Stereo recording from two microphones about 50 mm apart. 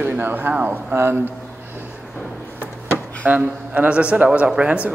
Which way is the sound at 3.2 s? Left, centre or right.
Right.